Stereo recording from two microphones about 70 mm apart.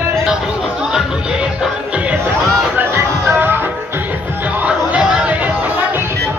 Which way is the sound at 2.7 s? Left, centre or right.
Right.